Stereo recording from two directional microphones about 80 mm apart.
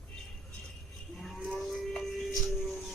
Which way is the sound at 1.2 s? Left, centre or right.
Centre.